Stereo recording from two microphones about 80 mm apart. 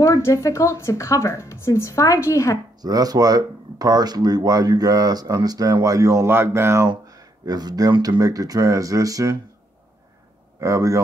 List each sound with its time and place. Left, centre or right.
0.0 s a woman's voice: left
2.8 s speech: right
6.2 s speech: right
6.9 s a sound: right
8.2 s speech: right
10.6 s speech: right